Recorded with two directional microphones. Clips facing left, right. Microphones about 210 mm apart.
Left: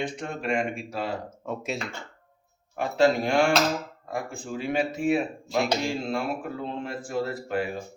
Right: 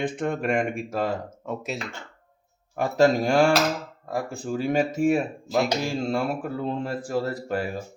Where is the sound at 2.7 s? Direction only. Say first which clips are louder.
Right 2 dB; 45° right (ahead or behind).